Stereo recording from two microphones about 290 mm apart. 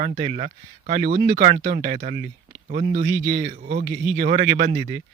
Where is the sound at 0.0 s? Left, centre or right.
Right.